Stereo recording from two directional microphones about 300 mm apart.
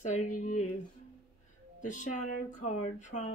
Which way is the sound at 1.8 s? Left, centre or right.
Left.